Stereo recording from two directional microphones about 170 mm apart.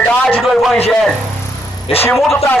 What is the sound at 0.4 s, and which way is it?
Speech, centre (ahead or behind).